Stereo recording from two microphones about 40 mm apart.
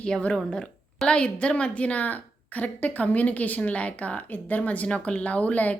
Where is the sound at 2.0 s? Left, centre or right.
Left.